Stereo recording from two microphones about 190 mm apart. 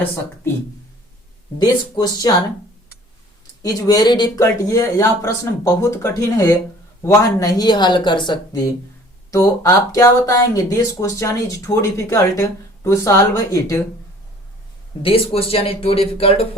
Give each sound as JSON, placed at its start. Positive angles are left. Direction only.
{"t": 1.5, "sound": "speech", "side_deg": 20}
{"t": 3.6, "sound": "speech", "side_deg": 20}
{"t": 15.0, "sound": "speech", "side_deg": 30}